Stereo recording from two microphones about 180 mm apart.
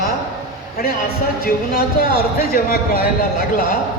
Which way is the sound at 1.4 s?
55° left (ahead or behind).